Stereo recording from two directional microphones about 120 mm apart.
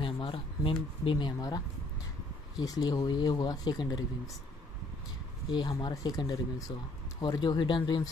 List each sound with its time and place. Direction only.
0.0 s a sound: 45° left (ahead or behind)
1.0 s speech: 40° left (ahead or behind)
2.6 s speech: 30° left (ahead or behind)
5.5 s speech: 40° left (ahead or behind)